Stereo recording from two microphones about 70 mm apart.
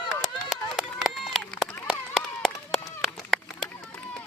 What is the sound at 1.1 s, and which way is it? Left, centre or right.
Run, centre.